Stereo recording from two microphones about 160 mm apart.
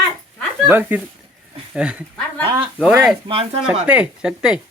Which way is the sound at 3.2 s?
35° right (ahead or behind).